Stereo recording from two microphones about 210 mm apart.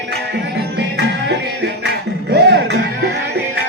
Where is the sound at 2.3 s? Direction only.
50° right (ahead or behind).